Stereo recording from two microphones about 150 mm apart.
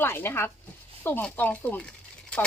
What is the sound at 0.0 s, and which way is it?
Speech, 15° left (ahead or behind).